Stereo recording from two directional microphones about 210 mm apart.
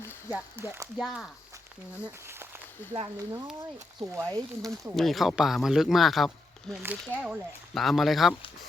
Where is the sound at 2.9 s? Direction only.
20° right (ahead or behind).